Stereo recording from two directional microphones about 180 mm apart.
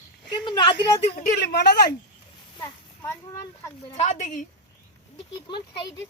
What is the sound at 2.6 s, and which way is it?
Speech, 15° left (ahead or behind).